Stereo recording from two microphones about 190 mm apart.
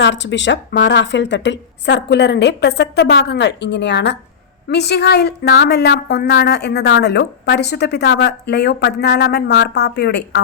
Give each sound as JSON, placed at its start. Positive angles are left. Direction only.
{"t": 0.0, "sound": "a woman's voice", "side_deg": 70}